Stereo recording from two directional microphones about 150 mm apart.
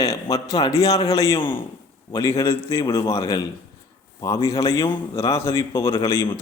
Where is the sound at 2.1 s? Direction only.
20° left (ahead or behind).